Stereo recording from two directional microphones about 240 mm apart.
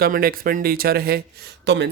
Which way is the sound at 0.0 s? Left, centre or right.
Right.